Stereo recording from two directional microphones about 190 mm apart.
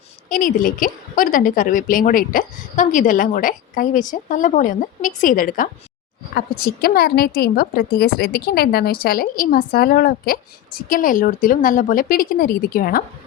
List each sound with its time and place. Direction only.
0.3 s a woman's voice: 45° left (ahead or behind)